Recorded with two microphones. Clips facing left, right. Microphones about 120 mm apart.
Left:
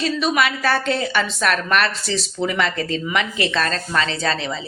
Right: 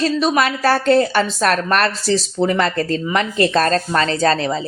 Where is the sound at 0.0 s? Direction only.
40° right (ahead or behind).